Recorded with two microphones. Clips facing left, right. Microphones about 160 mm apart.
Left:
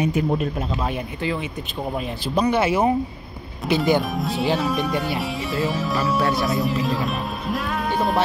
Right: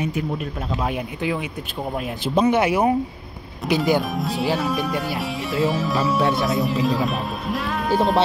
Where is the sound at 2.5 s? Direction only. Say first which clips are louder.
Right 1 dB; 15° right (ahead or behind).